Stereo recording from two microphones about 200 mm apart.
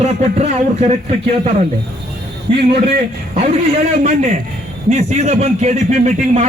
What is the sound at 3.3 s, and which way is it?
A man's voice, 35° right (ahead or behind).